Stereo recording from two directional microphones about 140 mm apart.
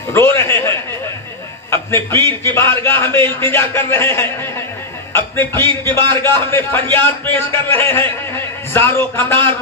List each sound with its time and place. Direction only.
0.1 s a man's voice: 20° left (ahead or behind)